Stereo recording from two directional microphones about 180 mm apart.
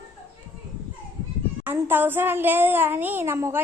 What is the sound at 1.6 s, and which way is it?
A child's voice, 10° right (ahead or behind).